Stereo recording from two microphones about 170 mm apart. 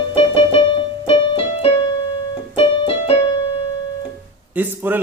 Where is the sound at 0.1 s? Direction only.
30° left (ahead or behind).